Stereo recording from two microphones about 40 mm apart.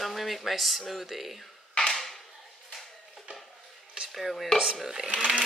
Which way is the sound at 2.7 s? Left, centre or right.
Centre.